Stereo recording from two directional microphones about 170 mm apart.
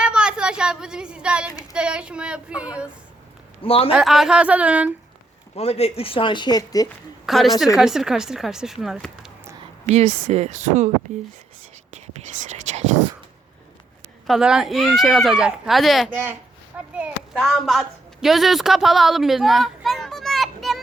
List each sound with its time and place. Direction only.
0.0 s a sound: 5° right (ahead or behind)
1.7 s a child's voice: 5° right (ahead or behind)
3.6 s speech: 35° left (ahead or behind)
3.9 s a child's voice: centre (ahead or behind)
5.5 s speech: 40° left (ahead or behind); by 6.8 s 20° left (ahead or behind)
7.3 s speech: centre (ahead or behind)
9.8 s speech: 40° right (ahead or behind)
12.5 s whispering: 45° right (ahead or behind)
14.3 s a woman's voice: 5° right (ahead or behind)